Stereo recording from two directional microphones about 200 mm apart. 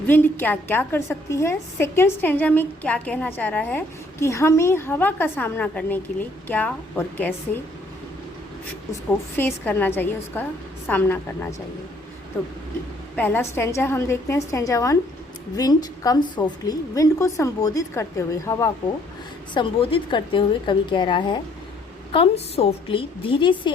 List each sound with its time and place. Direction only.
0.1 s a woman's voice: 10° left (ahead or behind)
8.9 s a woman's voice: 10° left (ahead or behind)
13.1 s a woman's voice: 10° left (ahead or behind)
19.5 s a woman's voice: 25° left (ahead or behind)